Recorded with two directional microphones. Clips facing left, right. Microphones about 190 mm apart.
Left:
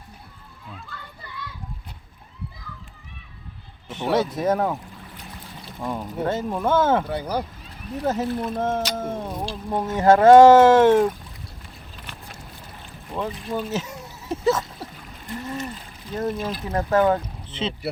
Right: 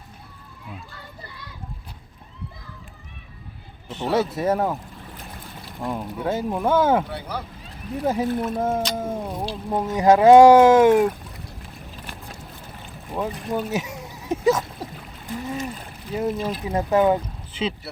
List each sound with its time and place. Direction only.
4.1 s speech: 5° right (ahead or behind)
5.8 s speech: 5° right (ahead or behind)
7.1 s speech: 40° left (ahead or behind)
8.0 s speech: 10° right (ahead or behind)
13.1 s a sound: 15° right (ahead or behind)
16.1 s speech: 10° right (ahead or behind)